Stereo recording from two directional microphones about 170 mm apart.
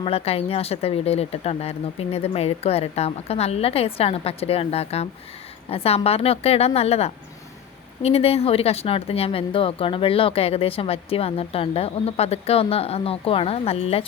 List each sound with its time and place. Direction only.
0.0 s speech: 35° left (ahead or behind)